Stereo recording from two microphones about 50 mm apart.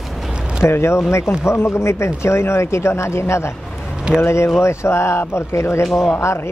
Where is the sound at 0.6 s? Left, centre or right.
Left.